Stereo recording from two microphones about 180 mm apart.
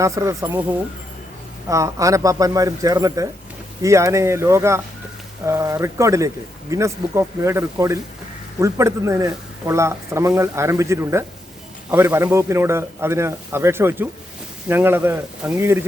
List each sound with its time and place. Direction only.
0.0 s a man's voice: 15° right (ahead or behind)